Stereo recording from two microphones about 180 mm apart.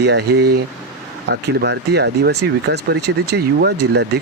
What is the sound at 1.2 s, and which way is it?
Speech, 70° right (ahead or behind).